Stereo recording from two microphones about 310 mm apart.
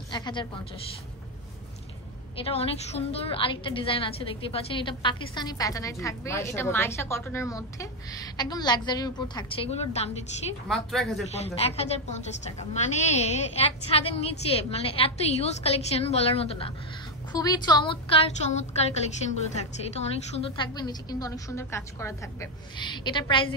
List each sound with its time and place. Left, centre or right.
0.1 s a woman's voice: centre
2.3 s a woman's voice: centre
10.7 s a woman's voice: centre
11.3 s a woman's voice: centre